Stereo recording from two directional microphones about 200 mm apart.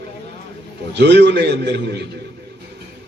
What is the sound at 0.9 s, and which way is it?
Speech, 60° right (ahead or behind).